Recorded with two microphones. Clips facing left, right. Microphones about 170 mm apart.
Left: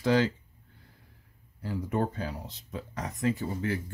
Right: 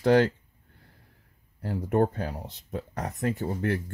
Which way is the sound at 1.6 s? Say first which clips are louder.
Right 5 dB; 60° right (ahead or behind).